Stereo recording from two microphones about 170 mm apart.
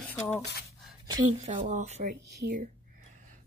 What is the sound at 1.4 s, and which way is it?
Speech, 45° right (ahead or behind).